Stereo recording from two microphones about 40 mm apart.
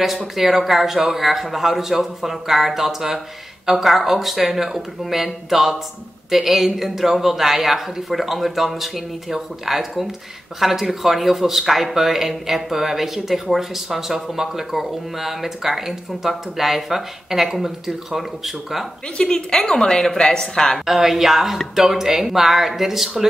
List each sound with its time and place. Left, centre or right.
0.4 s a man's voice: centre
19.1 s a woman's voice: centre
20.8 s a man's voice: centre